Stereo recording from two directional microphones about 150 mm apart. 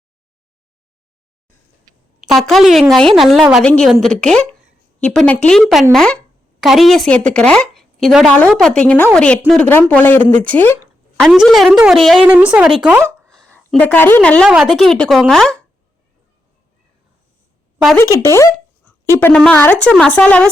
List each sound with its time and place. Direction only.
2.2 s a woman's voice: centre (ahead or behind)
11.2 s speech: centre (ahead or behind)
14.5 s speech: 5° right (ahead or behind)
17.9 s speech: 20° left (ahead or behind)
19.5 s speech: 10° left (ahead or behind)